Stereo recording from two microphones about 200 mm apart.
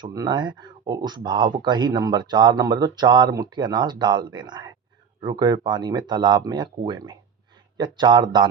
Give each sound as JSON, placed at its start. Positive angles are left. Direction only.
{"t": 0.0, "sound": "speech", "side_deg": -20}